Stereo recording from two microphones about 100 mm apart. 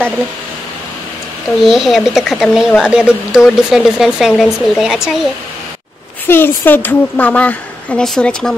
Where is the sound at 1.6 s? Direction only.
Centre (ahead or behind).